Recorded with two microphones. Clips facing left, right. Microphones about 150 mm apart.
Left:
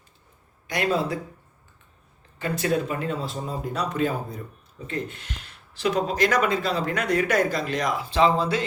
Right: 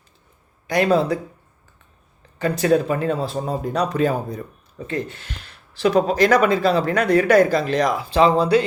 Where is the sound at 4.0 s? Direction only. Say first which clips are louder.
Right 5 dB; 80° right.